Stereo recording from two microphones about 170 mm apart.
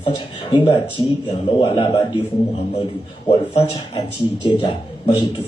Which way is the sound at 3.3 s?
30° left (ahead or behind).